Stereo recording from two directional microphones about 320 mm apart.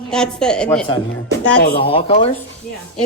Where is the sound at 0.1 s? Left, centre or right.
Centre.